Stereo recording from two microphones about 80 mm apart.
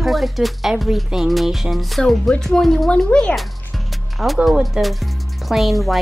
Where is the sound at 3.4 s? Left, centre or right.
Centre.